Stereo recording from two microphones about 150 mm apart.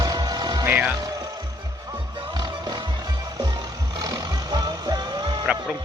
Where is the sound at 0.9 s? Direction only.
25° right (ahead or behind).